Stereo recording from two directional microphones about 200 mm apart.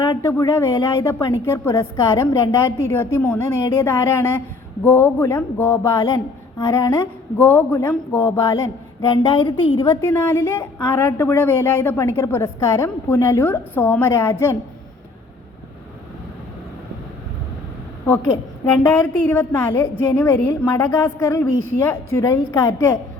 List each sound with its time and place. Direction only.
0.0 s a woman's voice: 15° left (ahead or behind)
19.3 s a woman's voice: 15° left (ahead or behind)